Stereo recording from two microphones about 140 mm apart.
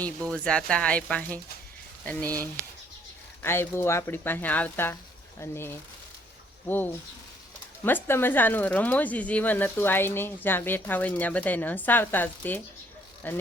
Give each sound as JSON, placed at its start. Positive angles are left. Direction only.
{"t": 0.3, "sound": "speech", "side_deg": 5}
{"t": 3.4, "sound": "speech", "side_deg": 15}